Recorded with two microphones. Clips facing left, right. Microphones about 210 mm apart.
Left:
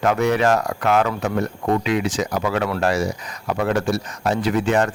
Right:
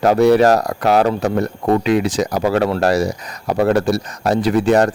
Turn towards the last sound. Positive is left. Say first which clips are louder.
# right 5 dB
turn(degrees=-40)  # may be behind; listen again after turning